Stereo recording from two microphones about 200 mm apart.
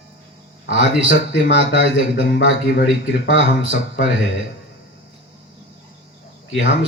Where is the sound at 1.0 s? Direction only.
65° left (ahead or behind).